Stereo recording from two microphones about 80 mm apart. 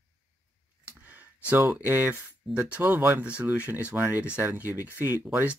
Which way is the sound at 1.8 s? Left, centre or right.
Right.